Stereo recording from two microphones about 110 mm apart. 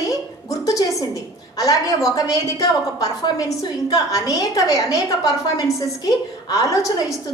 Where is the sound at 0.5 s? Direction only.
30° left (ahead or behind).